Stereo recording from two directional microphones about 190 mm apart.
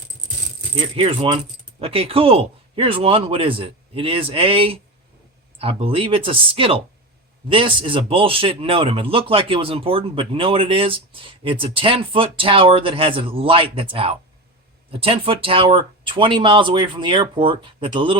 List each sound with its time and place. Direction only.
0.9 s a man's voice: 25° right (ahead or behind)